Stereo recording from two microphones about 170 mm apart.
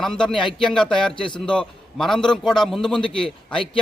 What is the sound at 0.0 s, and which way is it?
Speech, 5° left (ahead or behind).